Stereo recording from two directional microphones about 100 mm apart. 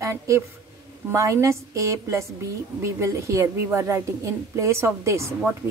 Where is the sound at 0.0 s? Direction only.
30° right (ahead or behind).